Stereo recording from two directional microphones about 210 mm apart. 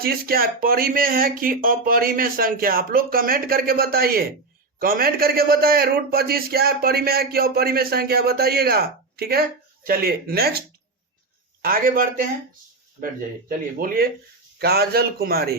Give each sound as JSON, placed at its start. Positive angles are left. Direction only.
{"t": 0.0, "sound": "a man's voice", "side_deg": -45}
{"t": 11.6, "sound": "a man's voice", "side_deg": -45}
{"t": 13.7, "sound": "a man's voice", "side_deg": -45}